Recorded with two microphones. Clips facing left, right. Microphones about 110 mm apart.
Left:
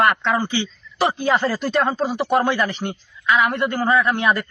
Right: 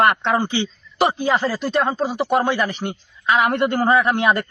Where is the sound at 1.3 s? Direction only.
Centre (ahead or behind).